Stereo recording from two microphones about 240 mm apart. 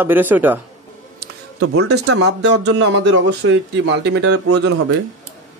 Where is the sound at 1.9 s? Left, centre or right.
Right.